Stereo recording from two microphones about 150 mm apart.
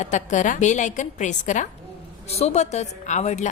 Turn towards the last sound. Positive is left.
turn(degrees=50)  # may be behind; listen again after turning